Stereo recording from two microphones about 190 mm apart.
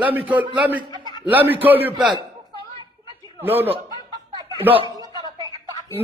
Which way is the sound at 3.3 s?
10° right (ahead or behind).